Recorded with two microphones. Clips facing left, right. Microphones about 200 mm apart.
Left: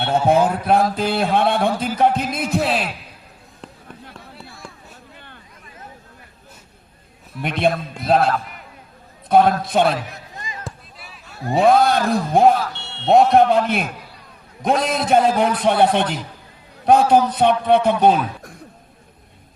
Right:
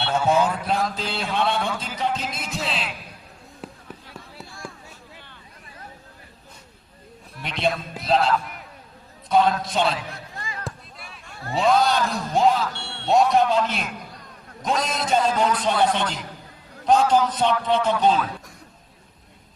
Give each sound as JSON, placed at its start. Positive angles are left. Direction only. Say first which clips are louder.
{"t": 0.3, "sound": "a man's voice", "louder": "left 5 dB", "side_deg": 55}
{"t": 2.0, "sound": "music", "louder": "left 9 dB", "side_deg": 55}
{"t": 3.6, "sound": "a sound", "louder": "right 2 dB", "side_deg": -5}
{"t": 7.4, "sound": "a man's voice", "louder": "left 5 dB", "side_deg": 55}
{"t": 10.3, "sound": "a sound", "louder": "left 2 dB", "side_deg": 20}
{"t": 10.6, "sound": "a sound", "louder": "even", "side_deg": 0}
{"t": 11.5, "sound": "a man's voice", "louder": "left 5 dB", "side_deg": 55}
{"t": 12.7, "sound": "fire alarm", "louder": "right 1 dB", "side_deg": 20}
{"t": 13.1, "sound": "a man's voice", "louder": "left 5 dB", "side_deg": 55}